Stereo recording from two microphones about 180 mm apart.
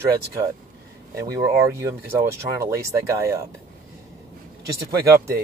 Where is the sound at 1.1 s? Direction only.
15° right (ahead or behind).